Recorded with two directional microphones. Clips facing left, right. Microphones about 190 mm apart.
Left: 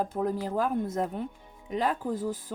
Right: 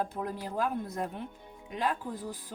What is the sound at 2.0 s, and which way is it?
Speech, 45° left (ahead or behind).